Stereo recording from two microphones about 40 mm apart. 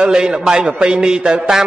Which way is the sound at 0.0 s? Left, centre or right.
Right.